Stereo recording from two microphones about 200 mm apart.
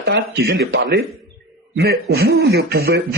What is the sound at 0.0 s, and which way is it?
Speech, 55° right (ahead or behind).